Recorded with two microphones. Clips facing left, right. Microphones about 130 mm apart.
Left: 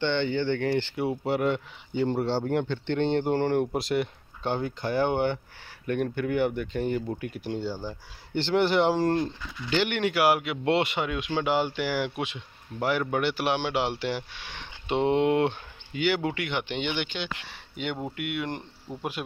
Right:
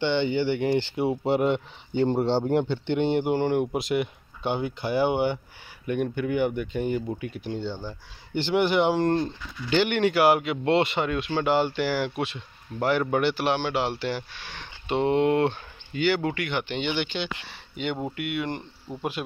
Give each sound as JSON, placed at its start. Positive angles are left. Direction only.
{"t": 0.0, "sound": "speech", "side_deg": -10}
{"t": 8.4, "sound": "speech", "side_deg": -5}
{"t": 13.7, "sound": "speech", "side_deg": 20}
{"t": 16.8, "sound": "speech", "side_deg": 5}